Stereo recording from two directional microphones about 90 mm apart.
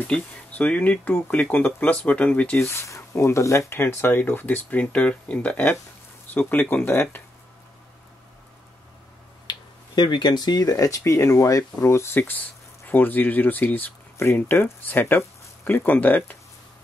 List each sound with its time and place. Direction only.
0.0 s speech: 15° left (ahead or behind)
2.6 s speech: 30° left (ahead or behind)
9.5 s speech: 55° left (ahead or behind); by 16.3 s 20° left (ahead or behind)